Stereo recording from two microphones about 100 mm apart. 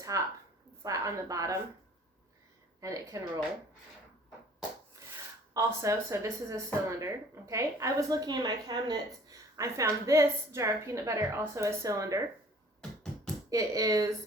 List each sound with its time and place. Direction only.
0.1 s a woman's voice: 35° right (ahead or behind)
2.8 s a woman's voice: 35° right (ahead or behind)
5.5 s a woman's voice: 30° right (ahead or behind)
13.2 s speech: 35° right (ahead or behind)